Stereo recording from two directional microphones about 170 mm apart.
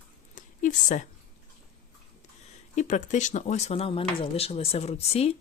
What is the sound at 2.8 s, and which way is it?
Speech, 45° left (ahead or behind).